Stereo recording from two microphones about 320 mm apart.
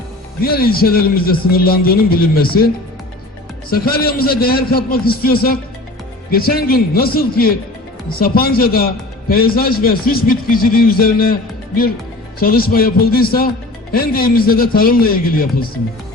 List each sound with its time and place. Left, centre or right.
0.4 s a man's voice: left
3.7 s a man's voice: left
12.4 s a man's voice: left